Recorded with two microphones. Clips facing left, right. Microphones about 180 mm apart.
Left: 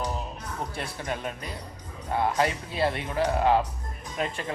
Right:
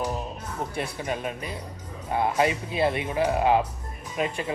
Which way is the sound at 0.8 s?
15° right (ahead or behind).